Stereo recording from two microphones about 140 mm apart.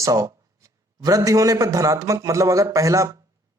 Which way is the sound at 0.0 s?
25° right (ahead or behind).